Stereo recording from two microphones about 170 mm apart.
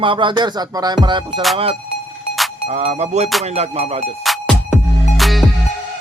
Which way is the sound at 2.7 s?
40° right (ahead or behind).